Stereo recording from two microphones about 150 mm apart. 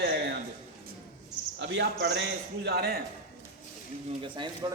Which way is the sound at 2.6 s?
90° right.